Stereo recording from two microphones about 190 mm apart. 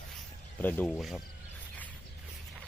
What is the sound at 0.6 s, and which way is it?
Cricket, 5° left (ahead or behind).